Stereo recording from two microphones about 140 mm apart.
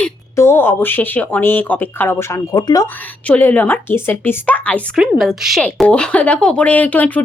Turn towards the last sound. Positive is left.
turn(degrees=10)  # may be behind; listen again after turning